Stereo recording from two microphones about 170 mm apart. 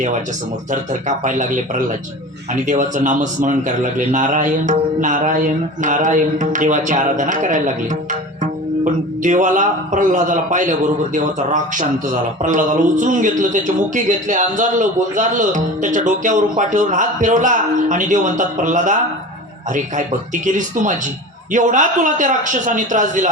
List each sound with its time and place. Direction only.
0.7 s speech: 50° right (ahead or behind)
8.8 s speech: 50° right (ahead or behind)